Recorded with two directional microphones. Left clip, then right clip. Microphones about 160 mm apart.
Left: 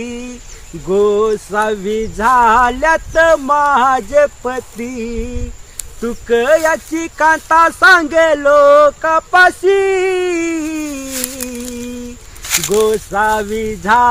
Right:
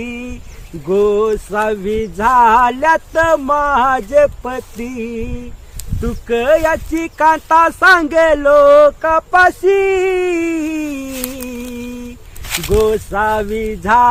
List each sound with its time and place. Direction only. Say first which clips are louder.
0.9 s speech: left 1 dB; 30° right (ahead or behind)
12.5 s speech: left 1 dB; centre (ahead or behind)
12.9 s speech: left 1 dB; 25° right (ahead or behind)